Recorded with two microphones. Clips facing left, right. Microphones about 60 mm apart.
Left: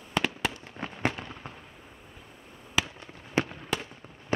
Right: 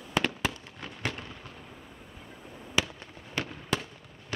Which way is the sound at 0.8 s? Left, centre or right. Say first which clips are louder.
Left 6 dB; left.